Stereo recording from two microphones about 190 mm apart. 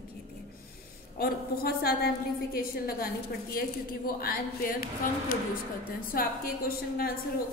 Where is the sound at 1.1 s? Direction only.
50° left (ahead or behind).